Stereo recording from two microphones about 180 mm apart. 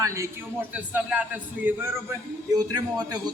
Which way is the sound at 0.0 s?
15° right (ahead or behind).